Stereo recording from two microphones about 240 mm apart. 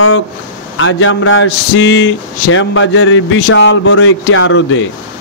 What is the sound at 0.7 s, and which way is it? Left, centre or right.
Speech, left.